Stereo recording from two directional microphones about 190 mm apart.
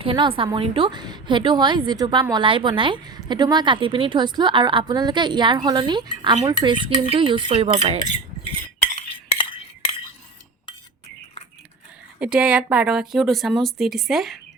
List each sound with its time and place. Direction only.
0.0 s speech: 25° right (ahead or behind)
9.0 s cutlery: 30° left (ahead or behind)
12.2 s speech: 5° right (ahead or behind)